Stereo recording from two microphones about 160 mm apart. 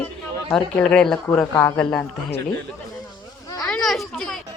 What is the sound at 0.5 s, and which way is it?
A woman's voice, 5° left (ahead or behind).